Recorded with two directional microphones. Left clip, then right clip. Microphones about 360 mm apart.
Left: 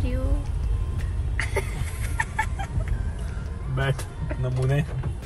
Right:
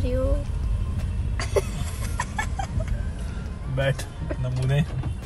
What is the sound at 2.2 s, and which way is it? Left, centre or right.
Chicken, centre.